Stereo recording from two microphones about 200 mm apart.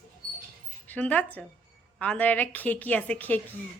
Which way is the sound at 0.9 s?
5° left (ahead or behind).